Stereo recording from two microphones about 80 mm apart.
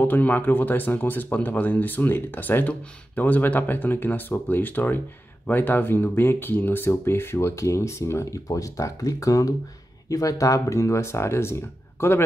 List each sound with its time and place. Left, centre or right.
0.0 s speech: left